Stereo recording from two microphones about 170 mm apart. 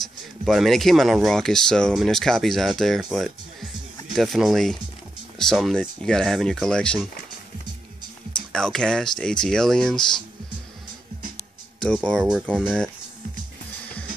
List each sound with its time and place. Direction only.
0.5 s speech: centre (ahead or behind)
8.5 s speech: 5° left (ahead or behind)
11.8 s speech: 5° left (ahead or behind)